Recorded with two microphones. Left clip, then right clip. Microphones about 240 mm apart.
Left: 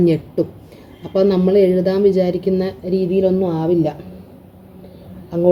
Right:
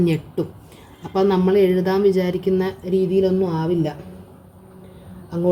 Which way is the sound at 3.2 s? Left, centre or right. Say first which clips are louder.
Left 3 dB; right.